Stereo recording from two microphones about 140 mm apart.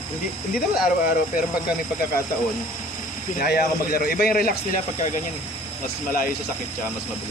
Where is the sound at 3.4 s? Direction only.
90° left.